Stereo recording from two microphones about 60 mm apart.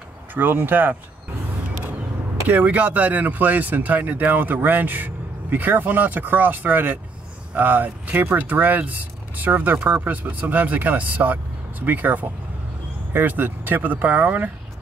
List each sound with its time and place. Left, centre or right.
0.3 s speech: right
2.4 s speech: right